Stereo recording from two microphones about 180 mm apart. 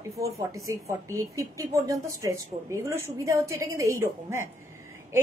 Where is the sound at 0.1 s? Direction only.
15° right (ahead or behind).